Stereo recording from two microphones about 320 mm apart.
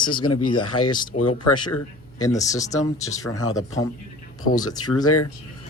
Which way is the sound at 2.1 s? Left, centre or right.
Centre.